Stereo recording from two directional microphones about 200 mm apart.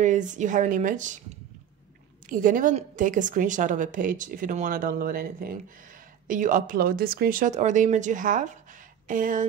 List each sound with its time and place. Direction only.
0.0 s a woman's voice: 40° right (ahead or behind)
2.2 s a woman's voice: 40° right (ahead or behind)